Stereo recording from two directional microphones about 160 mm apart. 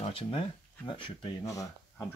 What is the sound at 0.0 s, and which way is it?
Speech, 35° left (ahead or behind).